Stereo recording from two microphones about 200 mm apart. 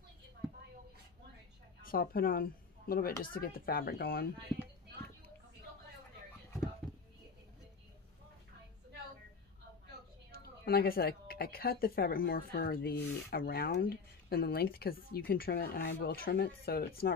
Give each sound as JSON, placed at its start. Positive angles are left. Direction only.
{"t": 1.8, "sound": "speech", "side_deg": 45}
{"t": 10.3, "sound": "speech", "side_deg": 50}